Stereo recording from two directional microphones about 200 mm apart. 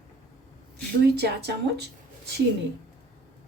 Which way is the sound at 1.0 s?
55° right (ahead or behind).